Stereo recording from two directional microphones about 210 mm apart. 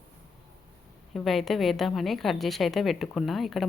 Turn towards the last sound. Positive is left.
turn(degrees=0)  # may be behind; listen again after turning